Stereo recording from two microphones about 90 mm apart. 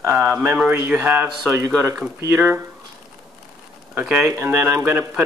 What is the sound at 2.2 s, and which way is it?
Speech, 35° right (ahead or behind).